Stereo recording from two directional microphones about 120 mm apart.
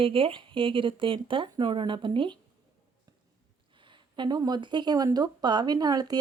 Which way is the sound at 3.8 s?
40° right (ahead or behind).